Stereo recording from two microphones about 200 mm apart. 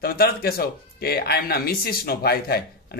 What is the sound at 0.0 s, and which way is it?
A man's voice, 50° left (ahead or behind).